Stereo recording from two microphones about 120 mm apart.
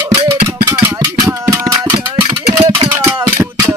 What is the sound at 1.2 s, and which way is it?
Music, 30° right (ahead or behind).